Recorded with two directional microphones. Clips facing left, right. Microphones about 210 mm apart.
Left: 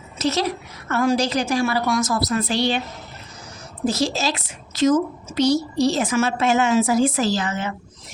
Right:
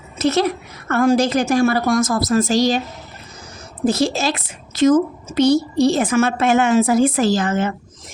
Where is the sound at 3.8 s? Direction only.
55° right (ahead or behind).